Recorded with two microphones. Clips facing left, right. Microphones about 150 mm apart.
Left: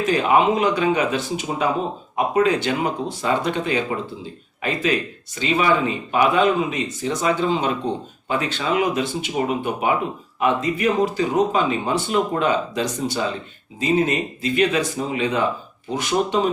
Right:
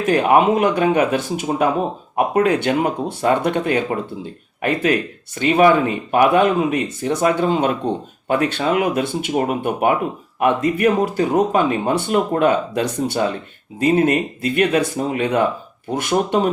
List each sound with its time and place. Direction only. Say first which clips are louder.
0.0 s speech: right 3 dB; 55° right (ahead or behind)